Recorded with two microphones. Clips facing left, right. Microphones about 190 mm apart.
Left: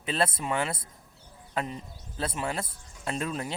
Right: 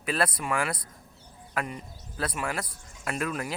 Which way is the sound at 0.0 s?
25° left (ahead or behind).